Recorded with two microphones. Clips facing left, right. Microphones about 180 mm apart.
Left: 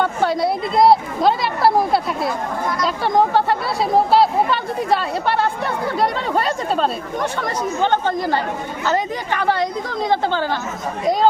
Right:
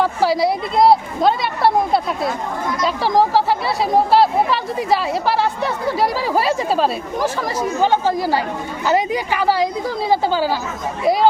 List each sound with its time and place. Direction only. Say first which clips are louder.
0.0 s a woman's voice: right 2 dB; 5° right (ahead or behind)